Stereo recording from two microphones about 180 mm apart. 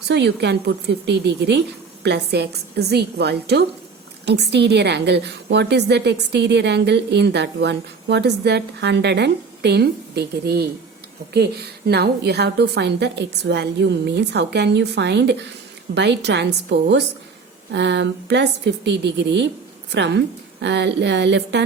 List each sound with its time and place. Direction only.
0.1 s a woman's voice: 70° right (ahead or behind)